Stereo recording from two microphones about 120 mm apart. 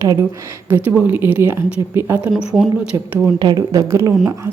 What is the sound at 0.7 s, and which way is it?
A woman's voice, 15° right (ahead or behind).